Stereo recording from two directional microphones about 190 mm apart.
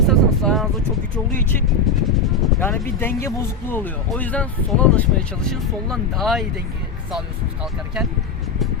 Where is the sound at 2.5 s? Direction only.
10° left (ahead or behind).